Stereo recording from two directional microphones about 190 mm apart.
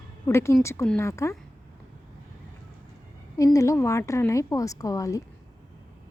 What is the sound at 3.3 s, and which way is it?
A woman's voice, 15° left (ahead or behind).